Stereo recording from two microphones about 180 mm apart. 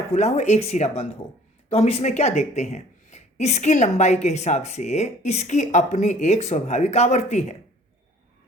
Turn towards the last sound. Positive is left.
turn(degrees=40)  # may be behind; listen again after turning